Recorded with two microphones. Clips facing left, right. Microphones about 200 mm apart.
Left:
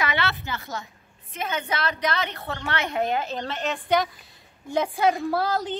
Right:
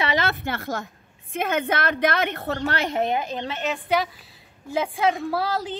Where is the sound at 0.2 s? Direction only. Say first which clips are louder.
Right 3 dB; 55° right (ahead or behind).